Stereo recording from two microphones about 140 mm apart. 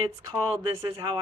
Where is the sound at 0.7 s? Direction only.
25° right (ahead or behind).